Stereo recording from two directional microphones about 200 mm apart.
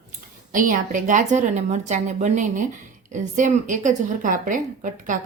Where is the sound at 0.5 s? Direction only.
40° right (ahead or behind).